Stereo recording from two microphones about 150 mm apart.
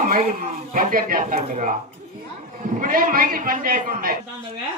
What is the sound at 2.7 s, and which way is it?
Speech, 65° right (ahead or behind).